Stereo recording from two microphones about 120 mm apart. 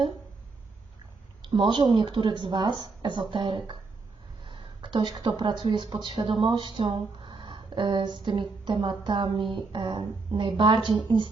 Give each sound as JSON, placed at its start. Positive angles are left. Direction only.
{"t": 1.4, "sound": "a woman's voice", "side_deg": -40}